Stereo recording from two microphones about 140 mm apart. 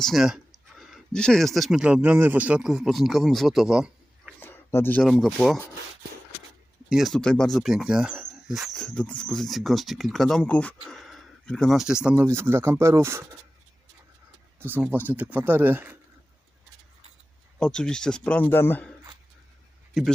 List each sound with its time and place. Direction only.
0.0 s speech: centre (ahead or behind)
4.4 s a sound: 15° left (ahead or behind)
5.0 s speech: centre (ahead or behind)
6.9 s speech: centre (ahead or behind)
12.1 s speech: 15° right (ahead or behind)
14.6 s speech: 10° right (ahead or behind)
17.6 s speech: 5° left (ahead or behind)
20.0 s speech: centre (ahead or behind)